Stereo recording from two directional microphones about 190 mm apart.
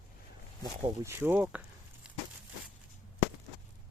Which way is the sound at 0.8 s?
15° right (ahead or behind).